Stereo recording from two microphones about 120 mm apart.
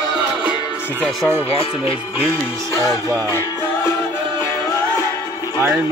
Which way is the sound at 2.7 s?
30° left (ahead or behind).